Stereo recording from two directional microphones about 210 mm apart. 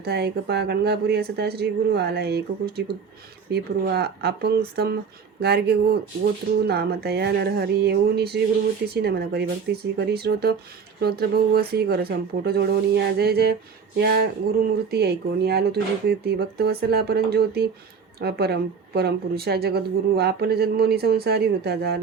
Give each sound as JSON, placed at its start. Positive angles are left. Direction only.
{"t": 0.0, "sound": "a woman's voice", "side_deg": -50}